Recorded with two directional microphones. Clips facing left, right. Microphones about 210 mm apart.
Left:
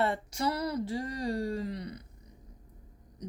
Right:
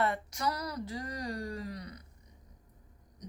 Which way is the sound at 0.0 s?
30° left (ahead or behind).